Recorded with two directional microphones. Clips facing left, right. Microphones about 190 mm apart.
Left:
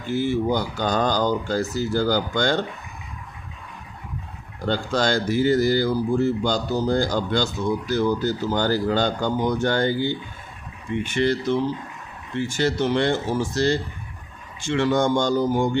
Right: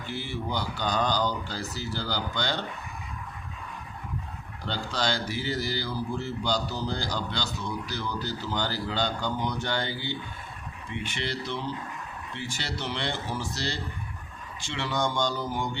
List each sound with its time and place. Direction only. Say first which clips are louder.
0.0 s speech: left 12 dB; 45° left (ahead or behind)
4.6 s speech: left 8 dB; 50° left (ahead or behind)